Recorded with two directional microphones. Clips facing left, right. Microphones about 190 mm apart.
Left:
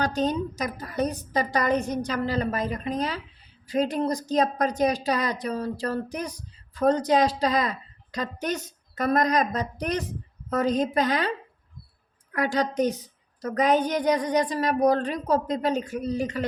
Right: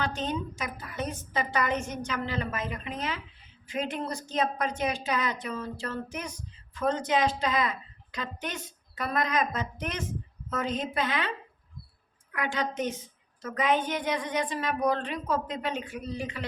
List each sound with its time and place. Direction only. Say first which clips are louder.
0.0 s a woman's voice: left 6 dB; 40° left (ahead or behind)